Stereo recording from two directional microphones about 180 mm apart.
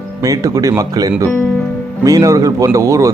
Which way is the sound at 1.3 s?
10° left (ahead or behind).